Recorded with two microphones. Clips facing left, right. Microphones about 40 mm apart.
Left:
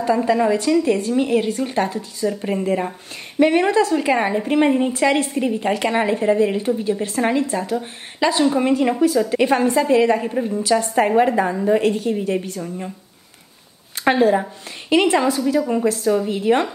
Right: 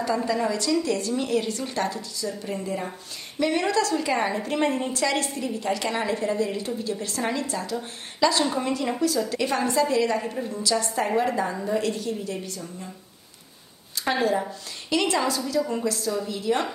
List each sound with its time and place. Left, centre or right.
0.0 s a woman's voice: left
14.0 s a woman's voice: left